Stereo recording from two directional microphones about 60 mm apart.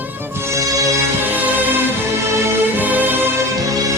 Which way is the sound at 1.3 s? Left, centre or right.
Right.